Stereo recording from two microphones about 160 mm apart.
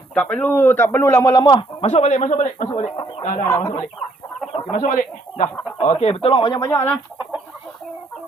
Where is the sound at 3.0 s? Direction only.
25° left (ahead or behind).